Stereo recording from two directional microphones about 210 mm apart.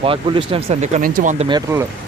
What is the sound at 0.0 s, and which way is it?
Speech, 25° right (ahead or behind).